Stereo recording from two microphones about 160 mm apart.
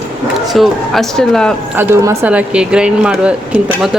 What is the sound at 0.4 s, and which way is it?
Speech, centre (ahead or behind).